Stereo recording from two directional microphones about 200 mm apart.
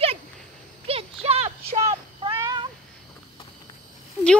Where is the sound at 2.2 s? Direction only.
20° right (ahead or behind).